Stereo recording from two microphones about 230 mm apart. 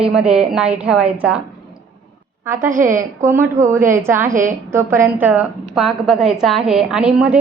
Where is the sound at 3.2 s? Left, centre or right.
Centre.